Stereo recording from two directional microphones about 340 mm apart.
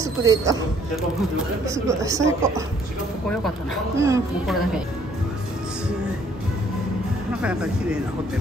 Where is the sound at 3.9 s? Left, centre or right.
Centre.